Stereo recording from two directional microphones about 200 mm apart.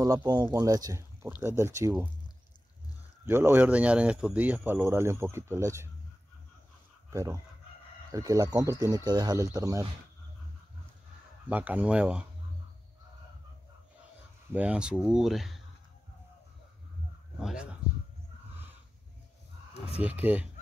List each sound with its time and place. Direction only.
0.0 s speech: 20° right (ahead or behind)
3.3 s speech: 10° right (ahead or behind)
7.1 s speech: 15° right (ahead or behind)
11.4 s speech: 5° right (ahead or behind)
14.5 s speech: 5° right (ahead or behind)
17.4 s speech: centre (ahead or behind)
20.0 s speech: 10° right (ahead or behind)